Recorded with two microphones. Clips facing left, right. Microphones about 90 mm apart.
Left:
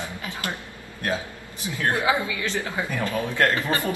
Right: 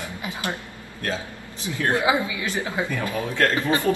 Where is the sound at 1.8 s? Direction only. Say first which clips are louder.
Right 1 dB; 20° right (ahead or behind).